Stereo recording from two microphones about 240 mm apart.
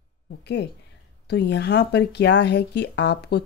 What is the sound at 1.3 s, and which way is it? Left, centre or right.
Speech, left.